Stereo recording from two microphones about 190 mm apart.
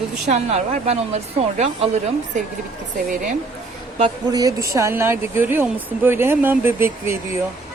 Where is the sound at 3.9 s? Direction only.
25° right (ahead or behind).